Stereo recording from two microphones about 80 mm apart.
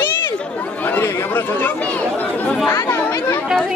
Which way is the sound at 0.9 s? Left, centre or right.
Left.